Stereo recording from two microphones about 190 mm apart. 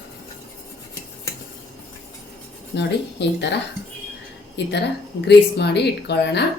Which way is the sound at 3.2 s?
65° left (ahead or behind).